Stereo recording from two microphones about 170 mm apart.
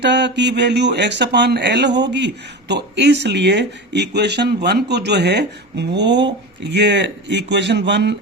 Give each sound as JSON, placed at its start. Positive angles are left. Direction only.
{"t": 0.0, "sound": "speech", "side_deg": -90}